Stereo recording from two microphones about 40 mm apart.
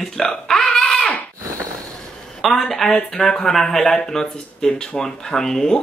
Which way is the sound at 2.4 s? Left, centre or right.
Centre.